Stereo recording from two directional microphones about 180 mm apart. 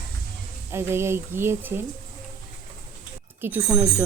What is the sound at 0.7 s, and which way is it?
Music, 15° right (ahead or behind).